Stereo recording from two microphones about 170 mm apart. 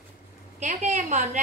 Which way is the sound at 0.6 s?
45° right (ahead or behind).